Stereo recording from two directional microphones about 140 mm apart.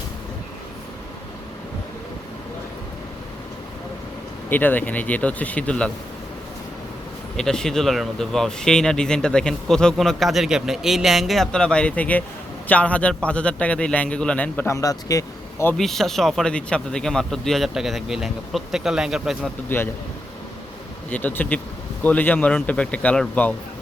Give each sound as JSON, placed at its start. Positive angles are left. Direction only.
{"t": 4.4, "sound": "a man's voice", "side_deg": 15}
{"t": 7.3, "sound": "a man's voice", "side_deg": 5}
{"t": 14.8, "sound": "speech", "side_deg": 25}
{"t": 15.8, "sound": "speech", "side_deg": 0}
{"t": 19.7, "sound": "a man's voice", "side_deg": 15}
{"t": 21.1, "sound": "a man's voice", "side_deg": 10}